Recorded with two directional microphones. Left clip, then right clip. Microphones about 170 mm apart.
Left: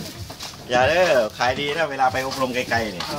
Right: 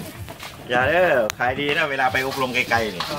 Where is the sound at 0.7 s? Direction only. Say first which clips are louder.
Left 1 dB; 25° right (ahead or behind).